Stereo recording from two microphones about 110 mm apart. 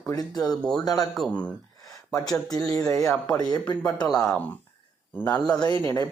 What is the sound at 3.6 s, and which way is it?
Speech, 10° left (ahead or behind).